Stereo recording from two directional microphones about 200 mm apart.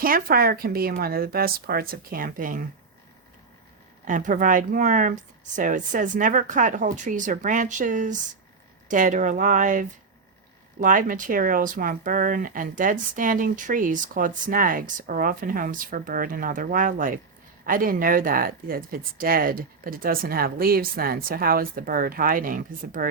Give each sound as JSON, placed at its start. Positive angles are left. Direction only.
{"t": 0.0, "sound": "speech", "side_deg": -45}
{"t": 4.0, "sound": "speech", "side_deg": -40}